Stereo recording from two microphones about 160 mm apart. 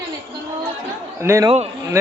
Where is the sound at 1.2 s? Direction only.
20° right (ahead or behind).